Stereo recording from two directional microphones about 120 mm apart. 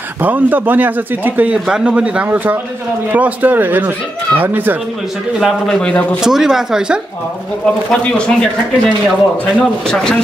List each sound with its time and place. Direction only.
0.2 s speech: 15° right (ahead or behind)
5.4 s speech: 5° left (ahead or behind)
6.2 s speech: 5° right (ahead or behind)
7.6 s speech: 5° left (ahead or behind)